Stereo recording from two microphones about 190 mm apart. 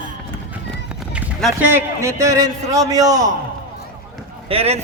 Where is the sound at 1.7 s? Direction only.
15° right (ahead or behind).